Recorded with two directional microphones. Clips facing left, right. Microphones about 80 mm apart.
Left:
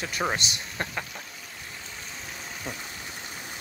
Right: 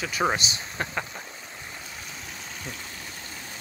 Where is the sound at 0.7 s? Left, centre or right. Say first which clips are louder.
Right 2 dB; centre.